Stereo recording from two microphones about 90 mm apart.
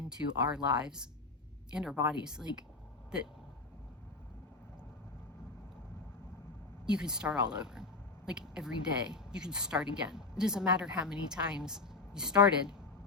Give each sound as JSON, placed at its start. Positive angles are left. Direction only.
{"t": 0.2, "sound": "speech", "side_deg": -30}
{"t": 0.5, "sound": "speech", "side_deg": -10}
{"t": 6.8, "sound": "speech", "side_deg": -10}